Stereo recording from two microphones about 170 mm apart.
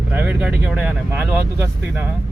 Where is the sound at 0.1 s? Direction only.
10° right (ahead or behind).